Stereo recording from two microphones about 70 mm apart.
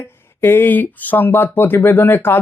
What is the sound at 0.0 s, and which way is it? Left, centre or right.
Speech, left.